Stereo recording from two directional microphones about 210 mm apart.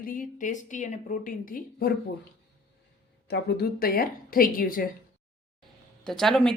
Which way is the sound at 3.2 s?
50° left (ahead or behind).